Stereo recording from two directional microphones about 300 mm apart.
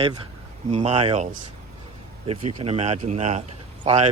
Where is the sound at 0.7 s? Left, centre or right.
Right.